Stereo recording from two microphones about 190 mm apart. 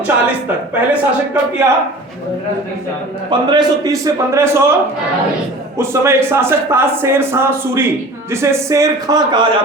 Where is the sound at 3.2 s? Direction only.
20° right (ahead or behind).